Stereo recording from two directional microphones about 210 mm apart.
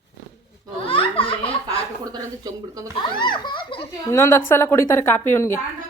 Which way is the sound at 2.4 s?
15° right (ahead or behind).